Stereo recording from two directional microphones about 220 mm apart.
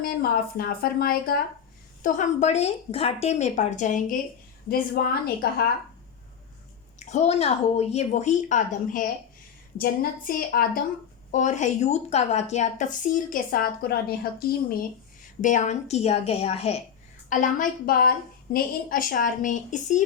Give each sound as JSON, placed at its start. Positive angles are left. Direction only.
{"t": 0.0, "sound": "a woman's voice", "side_deg": 45}
{"t": 7.0, "sound": "a woman's voice", "side_deg": 30}